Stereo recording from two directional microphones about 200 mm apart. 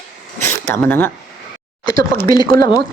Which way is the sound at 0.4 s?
10° left (ahead or behind).